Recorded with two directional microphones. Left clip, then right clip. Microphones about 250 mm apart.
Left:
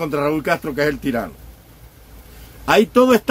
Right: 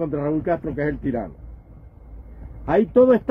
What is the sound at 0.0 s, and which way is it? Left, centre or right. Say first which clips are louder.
Speech: left 4 dB; centre.